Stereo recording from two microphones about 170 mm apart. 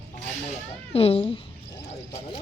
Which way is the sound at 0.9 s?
35° left (ahead or behind).